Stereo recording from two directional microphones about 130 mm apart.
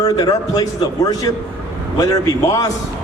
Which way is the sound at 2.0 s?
30° left (ahead or behind).